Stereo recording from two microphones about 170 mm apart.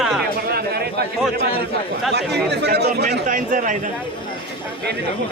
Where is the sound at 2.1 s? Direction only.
80° right.